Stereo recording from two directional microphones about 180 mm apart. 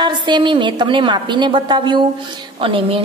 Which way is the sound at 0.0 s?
25° right (ahead or behind).